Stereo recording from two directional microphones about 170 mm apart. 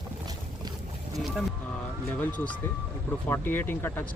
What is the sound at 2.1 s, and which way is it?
Speech, 10° left (ahead or behind).